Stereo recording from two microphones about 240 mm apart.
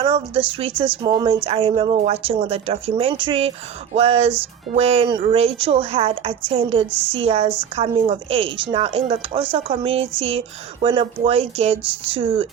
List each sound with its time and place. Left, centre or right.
0.0 s speech: right